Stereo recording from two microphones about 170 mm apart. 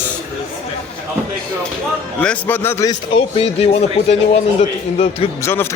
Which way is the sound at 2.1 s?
10° left (ahead or behind).